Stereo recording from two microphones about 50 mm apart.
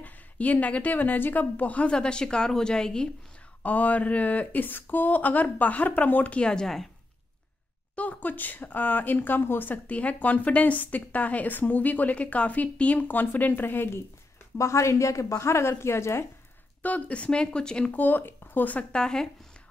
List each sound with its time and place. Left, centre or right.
0.0 s a woman's voice: left; by 3.1 s centre
3.6 s a woman's voice: left
6.4 s speech: centre
7.9 s a woman's voice: left
9.8 s a woman's voice: left
14.6 s a woman's voice: left
16.8 s a woman's voice: left
17.9 s speech: left
18.9 s speech: centre